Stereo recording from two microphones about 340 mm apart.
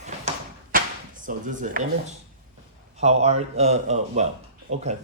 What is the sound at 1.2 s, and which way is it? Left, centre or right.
Speech, right.